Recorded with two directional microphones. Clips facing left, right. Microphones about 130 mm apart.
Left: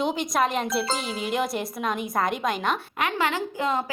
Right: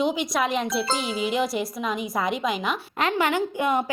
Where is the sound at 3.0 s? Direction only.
25° right (ahead or behind).